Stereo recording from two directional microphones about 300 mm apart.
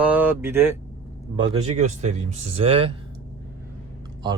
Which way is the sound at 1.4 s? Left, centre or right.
Right.